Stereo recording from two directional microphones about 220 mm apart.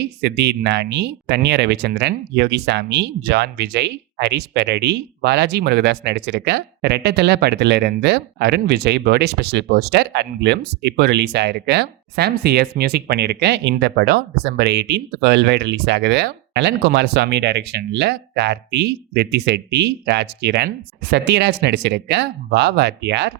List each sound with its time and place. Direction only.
0.0 s speech: 50° right (ahead or behind)